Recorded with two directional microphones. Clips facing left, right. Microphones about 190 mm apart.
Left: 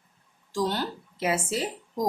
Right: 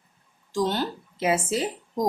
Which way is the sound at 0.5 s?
20° right (ahead or behind).